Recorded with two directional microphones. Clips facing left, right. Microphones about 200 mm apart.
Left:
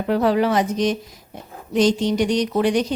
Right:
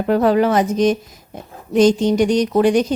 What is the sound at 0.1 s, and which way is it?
Speech, 45° right (ahead or behind).